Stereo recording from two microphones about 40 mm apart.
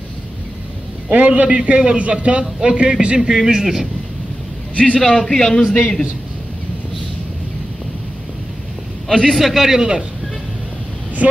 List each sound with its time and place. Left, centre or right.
1.1 s a man's voice: right
3.2 s speech: centre
4.7 s a man's voice: left
5.0 s a man's voice: centre
9.1 s a man's voice: centre
9.4 s speech: centre